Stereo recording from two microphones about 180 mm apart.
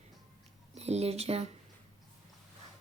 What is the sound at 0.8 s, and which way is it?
Speech, 35° right (ahead or behind).